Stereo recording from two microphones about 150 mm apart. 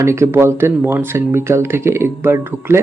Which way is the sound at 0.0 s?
20° right (ahead or behind).